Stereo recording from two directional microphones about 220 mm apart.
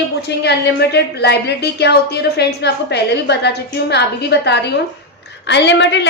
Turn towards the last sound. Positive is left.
turn(degrees=55)  # may be behind; listen again after turning